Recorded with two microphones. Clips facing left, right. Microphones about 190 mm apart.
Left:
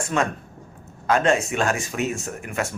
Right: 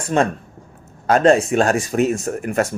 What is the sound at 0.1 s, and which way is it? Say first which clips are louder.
Speech: right 7 dB; 35° right (ahead or behind).